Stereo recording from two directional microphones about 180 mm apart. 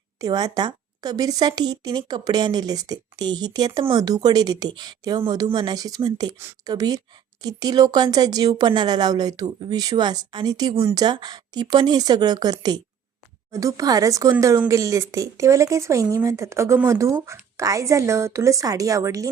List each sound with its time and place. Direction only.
0.2 s speech: 20° right (ahead or behind)